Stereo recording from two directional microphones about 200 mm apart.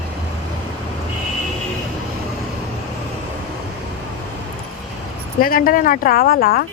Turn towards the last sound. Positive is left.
turn(degrees=50)  # may be behind; listen again after turning